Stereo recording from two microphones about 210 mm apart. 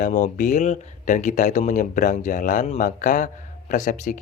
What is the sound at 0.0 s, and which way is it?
Speech, 35° left (ahead or behind).